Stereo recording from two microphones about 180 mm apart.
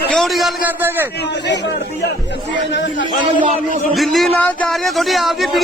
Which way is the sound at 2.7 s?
90° left.